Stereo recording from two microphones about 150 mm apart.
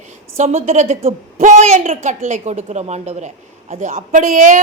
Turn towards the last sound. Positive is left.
turn(degrees=-60)  # may be behind; listen again after turning